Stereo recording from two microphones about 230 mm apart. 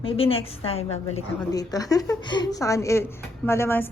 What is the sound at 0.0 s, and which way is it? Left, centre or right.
A woman's voice, left.